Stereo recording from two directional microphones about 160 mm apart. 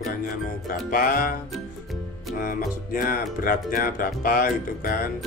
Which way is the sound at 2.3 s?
60° left (ahead or behind).